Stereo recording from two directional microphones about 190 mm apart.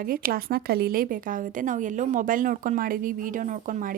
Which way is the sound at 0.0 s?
50° right (ahead or behind).